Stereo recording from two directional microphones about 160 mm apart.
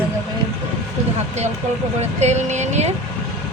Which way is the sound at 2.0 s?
45° right (ahead or behind).